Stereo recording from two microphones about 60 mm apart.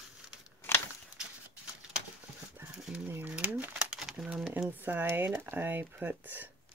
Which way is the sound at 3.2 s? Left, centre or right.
Right.